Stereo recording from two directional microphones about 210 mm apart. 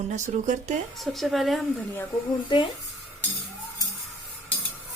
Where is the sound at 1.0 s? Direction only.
Centre (ahead or behind).